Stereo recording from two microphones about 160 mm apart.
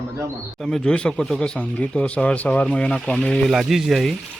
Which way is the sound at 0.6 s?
5° left (ahead or behind).